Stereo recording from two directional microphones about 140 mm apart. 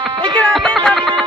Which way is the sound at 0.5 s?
5° left (ahead or behind).